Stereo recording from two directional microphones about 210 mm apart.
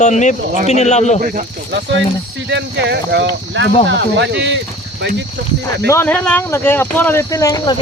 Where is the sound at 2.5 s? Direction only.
55° right (ahead or behind).